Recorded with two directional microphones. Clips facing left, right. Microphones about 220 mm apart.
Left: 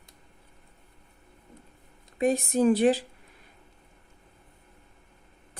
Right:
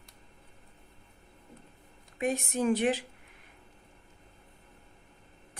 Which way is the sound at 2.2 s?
35° left (ahead or behind).